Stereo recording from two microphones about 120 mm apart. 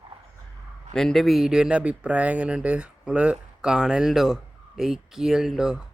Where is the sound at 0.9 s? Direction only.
5° left (ahead or behind).